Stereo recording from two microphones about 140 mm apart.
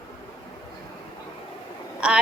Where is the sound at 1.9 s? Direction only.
5° right (ahead or behind).